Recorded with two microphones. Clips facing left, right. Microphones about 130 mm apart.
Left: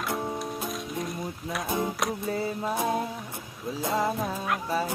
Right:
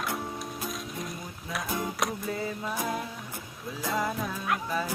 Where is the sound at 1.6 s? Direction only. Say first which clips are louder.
Left 4 dB; 20° left (ahead or behind).